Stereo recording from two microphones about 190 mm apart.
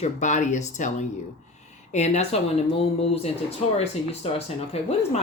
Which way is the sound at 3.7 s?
30° left (ahead or behind).